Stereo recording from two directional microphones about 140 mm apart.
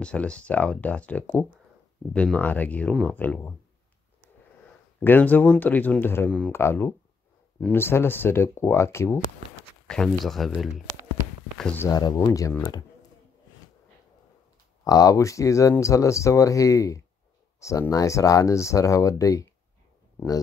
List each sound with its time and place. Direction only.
0.0 s speech: 10° left (ahead or behind)
5.0 s speech: 15° left (ahead or behind)
9.8 s speech: 5° left (ahead or behind)
11.8 s speech: 25° left (ahead or behind)
14.9 s speech: 25° left (ahead or behind)